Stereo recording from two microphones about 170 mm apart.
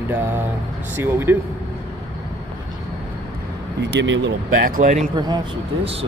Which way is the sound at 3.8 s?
90° right.